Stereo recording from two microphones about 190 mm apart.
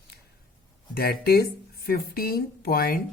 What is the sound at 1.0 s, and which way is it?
Speech, 55° left (ahead or behind).